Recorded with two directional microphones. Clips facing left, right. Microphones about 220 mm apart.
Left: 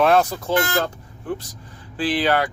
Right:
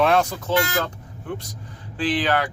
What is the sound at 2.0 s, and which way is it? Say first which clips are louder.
Speech: left 1 dB; 10° left (ahead or behind).